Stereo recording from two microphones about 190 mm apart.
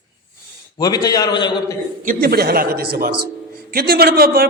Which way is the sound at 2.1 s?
50° right (ahead or behind).